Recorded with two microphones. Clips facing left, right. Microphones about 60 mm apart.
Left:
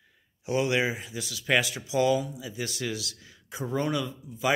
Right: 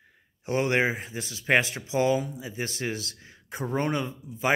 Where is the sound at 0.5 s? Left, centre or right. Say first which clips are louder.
Right 1 dB; right.